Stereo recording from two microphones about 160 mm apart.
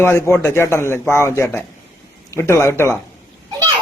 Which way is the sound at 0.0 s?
15° left (ahead or behind).